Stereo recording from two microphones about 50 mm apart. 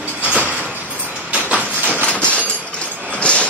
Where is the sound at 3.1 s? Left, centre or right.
Left.